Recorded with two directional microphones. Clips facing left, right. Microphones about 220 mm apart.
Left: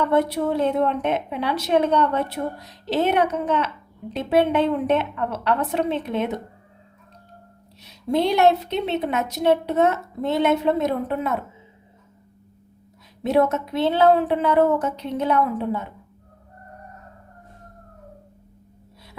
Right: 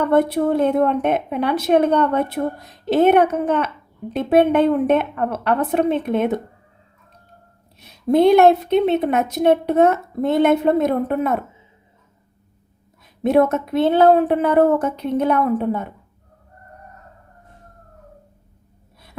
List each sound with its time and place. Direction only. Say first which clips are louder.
0.0 s a woman's voice: right 4 dB; 55° right (ahead or behind)
7.8 s a woman's voice: right 6 dB; 50° right (ahead or behind)
13.2 s a woman's voice: right 4 dB; 55° right (ahead or behind)